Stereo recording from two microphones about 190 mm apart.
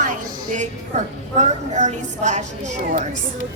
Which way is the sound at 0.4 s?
40° right (ahead or behind).